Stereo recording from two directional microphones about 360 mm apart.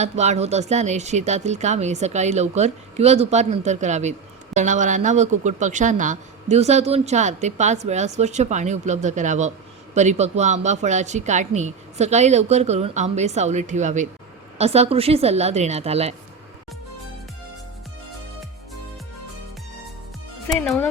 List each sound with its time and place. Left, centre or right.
0.0 s a woman's voice: centre
20.5 s speech: centre